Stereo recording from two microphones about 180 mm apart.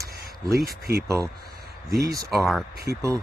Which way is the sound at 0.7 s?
60° right (ahead or behind).